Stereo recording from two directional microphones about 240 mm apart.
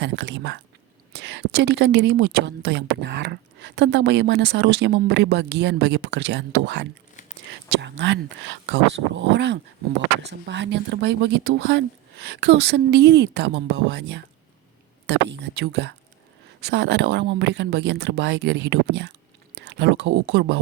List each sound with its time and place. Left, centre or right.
0.0 s speech: right